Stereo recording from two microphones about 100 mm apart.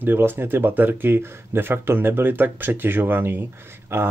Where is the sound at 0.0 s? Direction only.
20° right (ahead or behind).